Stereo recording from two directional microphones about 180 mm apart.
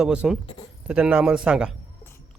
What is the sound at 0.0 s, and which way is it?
Speech, 5° right (ahead or behind).